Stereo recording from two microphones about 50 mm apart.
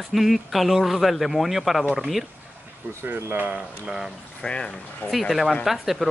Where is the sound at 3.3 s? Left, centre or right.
Right.